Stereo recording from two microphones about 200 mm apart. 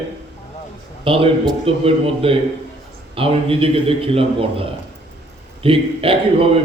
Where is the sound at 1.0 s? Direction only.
25° right (ahead or behind).